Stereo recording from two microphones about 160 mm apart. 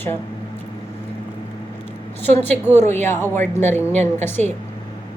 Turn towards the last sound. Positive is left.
turn(degrees=5)  # may be behind; listen again after turning